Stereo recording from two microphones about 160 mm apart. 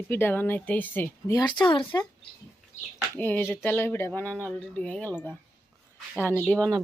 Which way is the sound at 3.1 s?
10° left (ahead or behind).